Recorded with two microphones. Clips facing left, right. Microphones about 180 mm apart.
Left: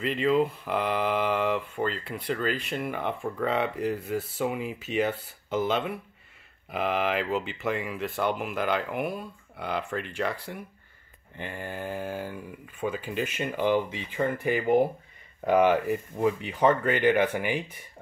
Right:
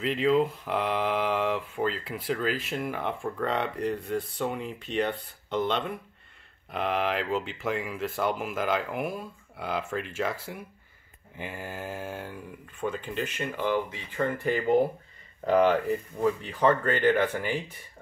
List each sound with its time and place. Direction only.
0.0 s speech: centre (ahead or behind)